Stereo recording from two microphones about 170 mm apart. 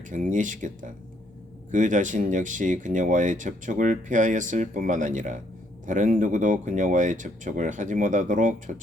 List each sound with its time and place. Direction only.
0.1 s speech: 50° right (ahead or behind)